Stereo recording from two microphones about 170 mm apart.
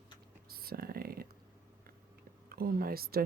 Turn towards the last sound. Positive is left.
turn(degrees=-60)  # may be behind; listen again after turning